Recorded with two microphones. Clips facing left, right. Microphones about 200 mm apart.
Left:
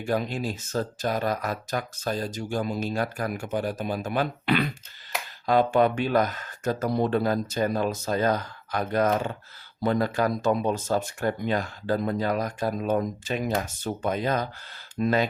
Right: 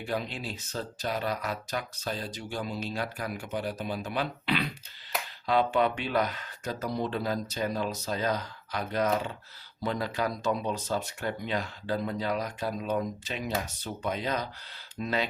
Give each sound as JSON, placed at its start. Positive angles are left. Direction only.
{"t": 0.0, "sound": "speech", "side_deg": 45}